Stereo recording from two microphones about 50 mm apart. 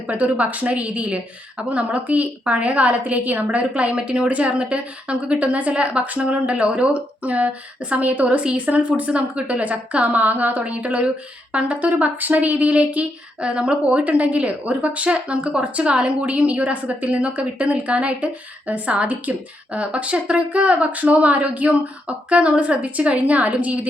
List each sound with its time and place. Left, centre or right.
0.1 s speech: right